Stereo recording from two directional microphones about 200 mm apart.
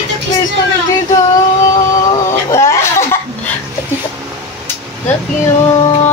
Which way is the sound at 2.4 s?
15° left (ahead or behind).